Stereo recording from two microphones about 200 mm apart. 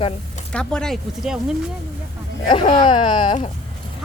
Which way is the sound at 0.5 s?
5° left (ahead or behind).